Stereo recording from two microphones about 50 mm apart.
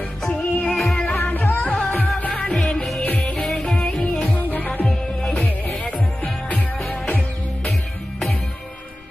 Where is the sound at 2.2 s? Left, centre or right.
Left.